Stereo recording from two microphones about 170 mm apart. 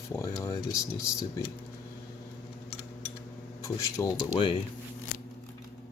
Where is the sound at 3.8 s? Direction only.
20° left (ahead or behind).